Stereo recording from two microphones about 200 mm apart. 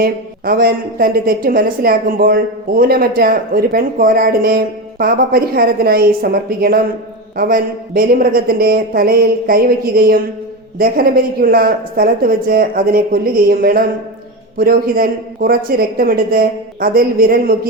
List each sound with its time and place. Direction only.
0.0 s a woman's voice: 50° right (ahead or behind)